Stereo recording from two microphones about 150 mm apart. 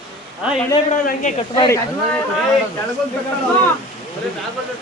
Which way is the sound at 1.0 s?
55° left (ahead or behind).